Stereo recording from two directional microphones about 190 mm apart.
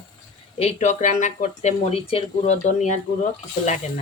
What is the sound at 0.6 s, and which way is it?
Speech, 35° left (ahead or behind).